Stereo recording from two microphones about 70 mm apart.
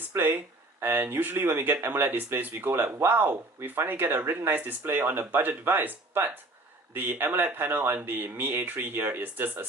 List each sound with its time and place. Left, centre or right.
0.8 s speech: right